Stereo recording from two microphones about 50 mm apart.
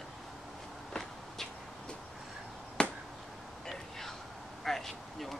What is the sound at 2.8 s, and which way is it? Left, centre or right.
Finger snapping, left.